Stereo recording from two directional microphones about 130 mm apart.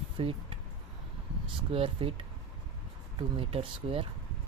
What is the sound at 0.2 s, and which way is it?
Speech, 45° right (ahead or behind).